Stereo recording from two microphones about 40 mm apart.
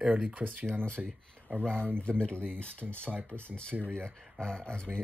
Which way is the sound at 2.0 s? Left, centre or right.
Left.